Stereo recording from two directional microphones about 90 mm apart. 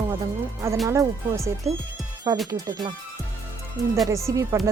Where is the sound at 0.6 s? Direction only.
30° right (ahead or behind).